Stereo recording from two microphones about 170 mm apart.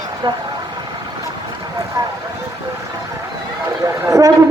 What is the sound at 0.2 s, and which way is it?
Speech, 25° right (ahead or behind).